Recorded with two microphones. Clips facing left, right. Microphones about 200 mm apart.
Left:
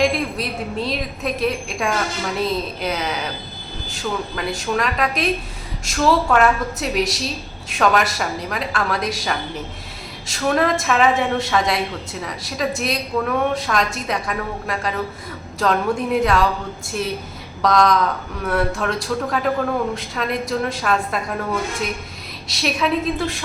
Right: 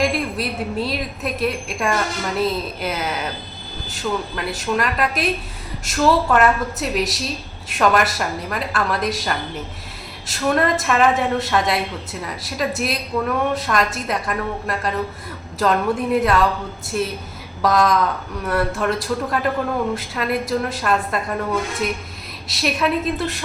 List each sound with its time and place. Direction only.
0.0 s a woman's voice: centre (ahead or behind)
17.6 s a woman's voice: 5° right (ahead or behind)